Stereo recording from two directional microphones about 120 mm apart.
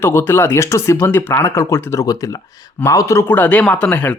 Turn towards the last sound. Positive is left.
turn(degrees=15)  # may be behind; listen again after turning